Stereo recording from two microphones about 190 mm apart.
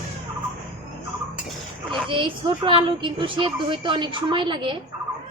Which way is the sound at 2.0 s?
25° right (ahead or behind).